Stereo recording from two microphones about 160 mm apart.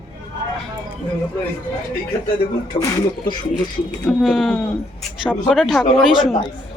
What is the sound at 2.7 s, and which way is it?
Speech, 35° left (ahead or behind).